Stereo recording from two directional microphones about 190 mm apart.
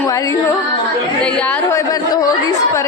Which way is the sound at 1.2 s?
10° left (ahead or behind).